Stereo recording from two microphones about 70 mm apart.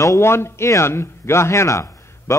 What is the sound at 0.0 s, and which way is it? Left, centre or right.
A man's voice, left.